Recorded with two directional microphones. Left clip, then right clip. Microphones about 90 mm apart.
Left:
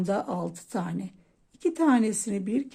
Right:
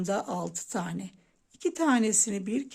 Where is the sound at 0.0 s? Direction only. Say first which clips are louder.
Left 2 dB; 20° right (ahead or behind).